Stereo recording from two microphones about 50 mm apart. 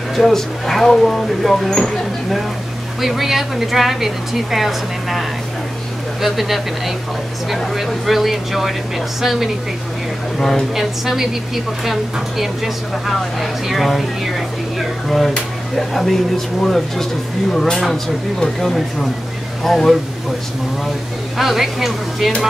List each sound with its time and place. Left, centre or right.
0.1 s a woman's voice: centre
3.0 s a woman's voice: centre
6.2 s a woman's voice: centre
10.7 s a woman's voice: centre
21.4 s a woman's voice: centre